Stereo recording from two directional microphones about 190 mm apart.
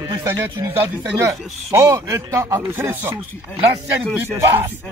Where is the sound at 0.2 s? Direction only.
15° right (ahead or behind).